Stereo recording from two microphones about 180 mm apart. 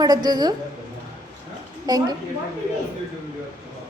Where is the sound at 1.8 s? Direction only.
20° right (ahead or behind).